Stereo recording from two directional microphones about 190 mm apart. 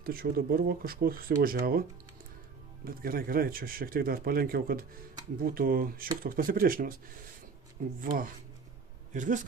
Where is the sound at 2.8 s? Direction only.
50° right (ahead or behind).